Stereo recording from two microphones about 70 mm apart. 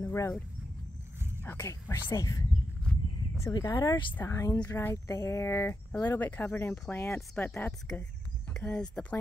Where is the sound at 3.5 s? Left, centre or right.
Left.